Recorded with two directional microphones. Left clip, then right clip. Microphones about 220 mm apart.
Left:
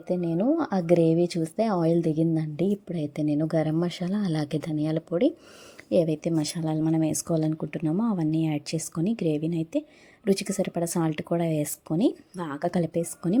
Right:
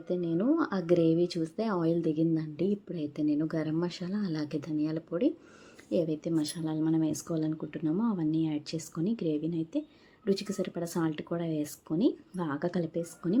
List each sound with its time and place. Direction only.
0.1 s speech: 30° left (ahead or behind)